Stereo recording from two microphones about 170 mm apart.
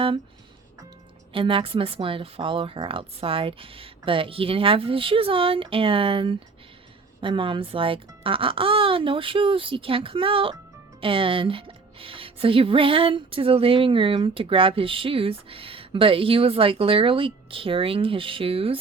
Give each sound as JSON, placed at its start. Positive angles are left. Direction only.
{"t": 1.3, "sound": "a woman's voice", "side_deg": -30}